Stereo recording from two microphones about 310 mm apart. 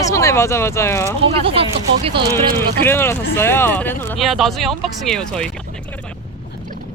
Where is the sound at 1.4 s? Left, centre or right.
Centre.